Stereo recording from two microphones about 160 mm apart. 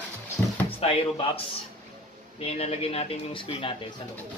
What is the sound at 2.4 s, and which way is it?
Speech, 40° left (ahead or behind).